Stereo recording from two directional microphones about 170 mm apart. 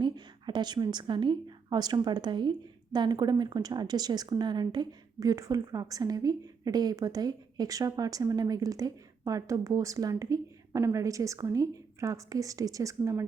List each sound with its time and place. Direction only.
0.0 s a woman's voice: 25° right (ahead or behind)